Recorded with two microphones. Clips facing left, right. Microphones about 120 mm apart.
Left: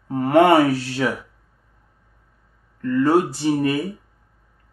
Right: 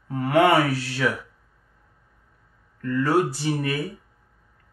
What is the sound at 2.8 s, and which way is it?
Speech, 30° left (ahead or behind).